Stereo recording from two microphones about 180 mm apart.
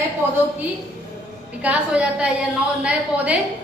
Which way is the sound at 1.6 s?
5° right (ahead or behind).